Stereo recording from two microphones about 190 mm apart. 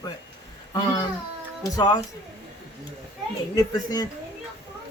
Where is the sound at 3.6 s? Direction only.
20° left (ahead or behind).